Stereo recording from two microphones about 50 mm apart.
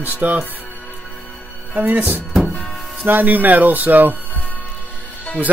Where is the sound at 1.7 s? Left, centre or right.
Right.